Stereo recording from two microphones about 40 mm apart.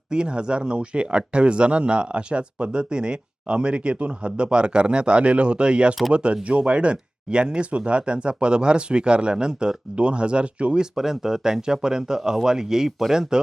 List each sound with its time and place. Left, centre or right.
0.1 s speech: right
10.9 s speech: centre